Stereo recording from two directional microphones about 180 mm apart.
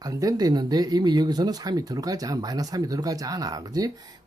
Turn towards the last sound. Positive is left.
turn(degrees=-20)  # may be behind; listen again after turning